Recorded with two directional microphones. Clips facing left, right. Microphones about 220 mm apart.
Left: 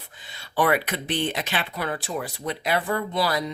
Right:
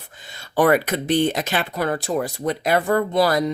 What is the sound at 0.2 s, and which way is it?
Speech, 45° right (ahead or behind).